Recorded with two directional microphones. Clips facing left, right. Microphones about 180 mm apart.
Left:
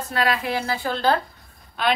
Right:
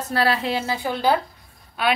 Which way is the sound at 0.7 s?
15° right (ahead or behind).